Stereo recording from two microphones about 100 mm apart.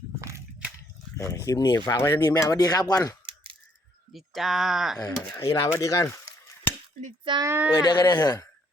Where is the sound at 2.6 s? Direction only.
40° left (ahead or behind).